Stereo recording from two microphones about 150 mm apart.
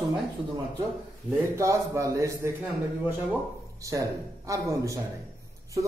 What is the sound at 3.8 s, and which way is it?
Speech, 20° right (ahead or behind).